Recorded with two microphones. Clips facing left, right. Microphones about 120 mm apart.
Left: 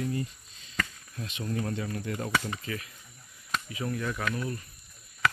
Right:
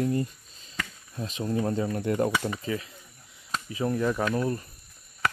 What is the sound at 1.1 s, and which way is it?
Speech, 30° right (ahead or behind).